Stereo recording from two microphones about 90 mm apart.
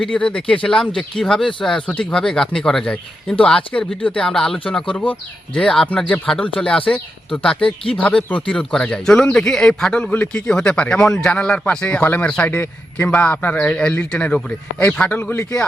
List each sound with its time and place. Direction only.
0.0 s speech: 10° left (ahead or behind)